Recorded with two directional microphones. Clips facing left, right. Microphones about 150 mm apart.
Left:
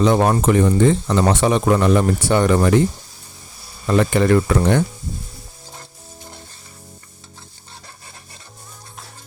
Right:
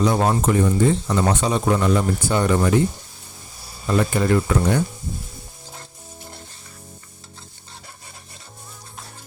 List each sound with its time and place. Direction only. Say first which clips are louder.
0.0 s speech: left 3 dB; 80° left
3.9 s speech: left 4 dB; 75° left (ahead or behind)